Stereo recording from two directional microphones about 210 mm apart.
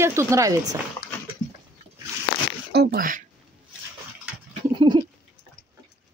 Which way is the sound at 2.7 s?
50° right (ahead or behind).